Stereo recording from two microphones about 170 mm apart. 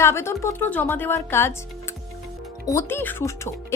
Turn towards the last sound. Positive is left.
turn(degrees=15)  # may be behind; listen again after turning